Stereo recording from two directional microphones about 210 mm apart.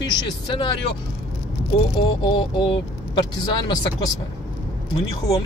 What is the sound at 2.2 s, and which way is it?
Speech, 20° left (ahead or behind).